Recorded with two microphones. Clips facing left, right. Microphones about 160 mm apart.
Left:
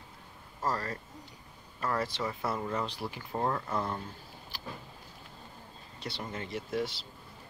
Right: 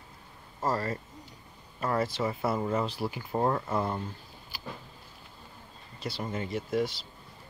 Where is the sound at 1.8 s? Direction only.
10° right (ahead or behind).